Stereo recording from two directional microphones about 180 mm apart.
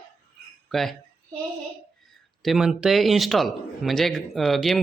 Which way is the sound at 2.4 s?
Centre (ahead or behind).